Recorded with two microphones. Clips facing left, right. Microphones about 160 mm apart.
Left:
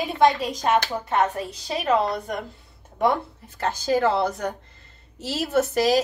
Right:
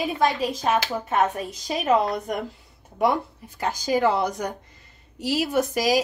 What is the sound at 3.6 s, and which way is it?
A woman's voice, 15° right (ahead or behind).